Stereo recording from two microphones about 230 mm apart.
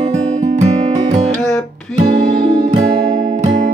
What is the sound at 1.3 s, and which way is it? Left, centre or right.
Music, centre.